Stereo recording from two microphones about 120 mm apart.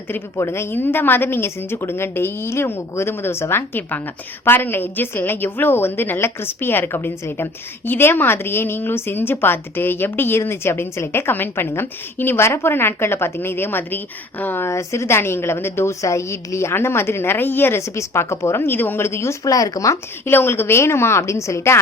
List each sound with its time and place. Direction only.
0.1 s a woman's voice: 20° left (ahead or behind)